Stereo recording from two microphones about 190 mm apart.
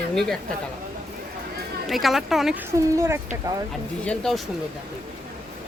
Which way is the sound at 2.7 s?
15° right (ahead or behind).